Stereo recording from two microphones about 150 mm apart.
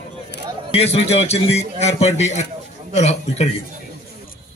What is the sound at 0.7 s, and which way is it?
Speech, 45° left (ahead or behind).